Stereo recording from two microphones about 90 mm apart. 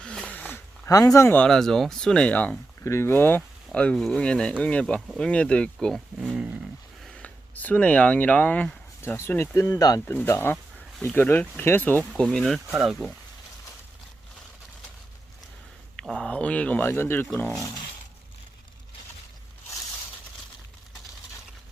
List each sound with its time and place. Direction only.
0.0 s a sound: 10° left (ahead or behind)
0.9 s speech: 40° left (ahead or behind)
1.5 s speech: 5° left (ahead or behind)
2.8 s speech: 30° left (ahead or behind)
3.7 s speech: 10° left (ahead or behind)
4.9 s speech: centre (ahead or behind)
5.2 s speech: 10° left (ahead or behind)
6.1 s speech: 15° right (ahead or behind)
7.2 s speech: 15° left (ahead or behind)
9.0 s speech: 30° left (ahead or behind)
9.6 s speech: 40° left (ahead or behind)
10.1 s speech: 25° left (ahead or behind)
12.1 s speech: 5° left (ahead or behind)
16.0 s speech: 10° left (ahead or behind); by 17.2 s 25° left (ahead or behind)